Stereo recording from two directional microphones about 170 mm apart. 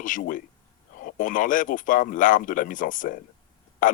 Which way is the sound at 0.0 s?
50° left (ahead or behind).